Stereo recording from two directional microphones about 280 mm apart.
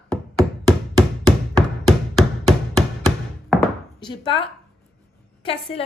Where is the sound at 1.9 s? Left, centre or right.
Centre.